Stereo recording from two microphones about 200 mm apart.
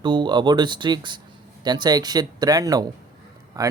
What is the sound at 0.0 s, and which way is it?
Speech, 25° right (ahead or behind).